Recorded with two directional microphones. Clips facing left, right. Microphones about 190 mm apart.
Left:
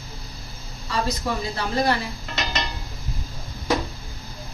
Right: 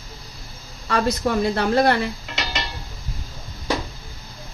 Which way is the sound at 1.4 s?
60° right (ahead or behind).